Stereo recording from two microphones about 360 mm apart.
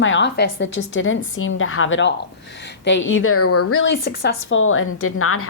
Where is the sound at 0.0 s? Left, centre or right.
Left.